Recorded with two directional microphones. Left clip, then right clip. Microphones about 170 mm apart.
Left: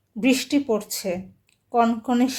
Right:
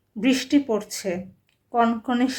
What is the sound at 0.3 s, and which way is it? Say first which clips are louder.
Speech: right 1 dB; 40° left (ahead or behind).